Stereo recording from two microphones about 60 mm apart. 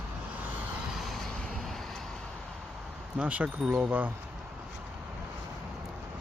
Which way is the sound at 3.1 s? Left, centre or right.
Right.